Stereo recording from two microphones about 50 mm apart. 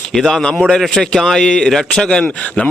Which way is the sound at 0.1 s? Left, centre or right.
Centre.